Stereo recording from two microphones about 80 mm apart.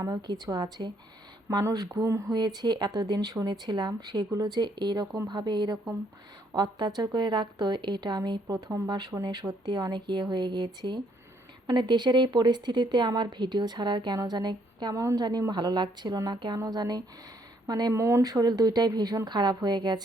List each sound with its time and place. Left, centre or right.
0.0 s speech: right
1.9 s speech: right
2.3 s a woman's voice: right
17.9 s speech: right